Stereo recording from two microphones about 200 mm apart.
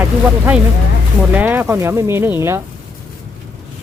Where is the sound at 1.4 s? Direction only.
10° right (ahead or behind).